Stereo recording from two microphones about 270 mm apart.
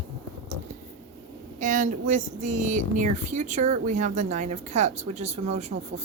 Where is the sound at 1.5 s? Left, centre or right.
Right.